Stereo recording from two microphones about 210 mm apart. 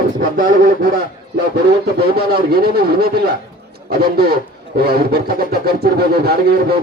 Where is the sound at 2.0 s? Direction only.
45° right (ahead or behind).